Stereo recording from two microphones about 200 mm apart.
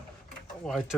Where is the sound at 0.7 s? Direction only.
Centre (ahead or behind).